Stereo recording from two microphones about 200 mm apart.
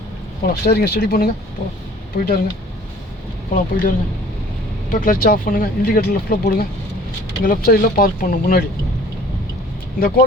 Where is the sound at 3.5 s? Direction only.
40° left (ahead or behind).